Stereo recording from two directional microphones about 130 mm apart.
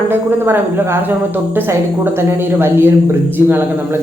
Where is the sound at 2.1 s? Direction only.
20° right (ahead or behind).